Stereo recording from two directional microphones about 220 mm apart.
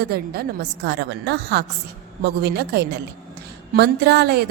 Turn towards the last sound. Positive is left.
turn(degrees=-45)  # may be behind; listen again after turning